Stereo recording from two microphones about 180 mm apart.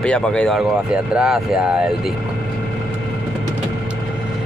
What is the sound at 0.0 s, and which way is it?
Speech, 5° left (ahead or behind).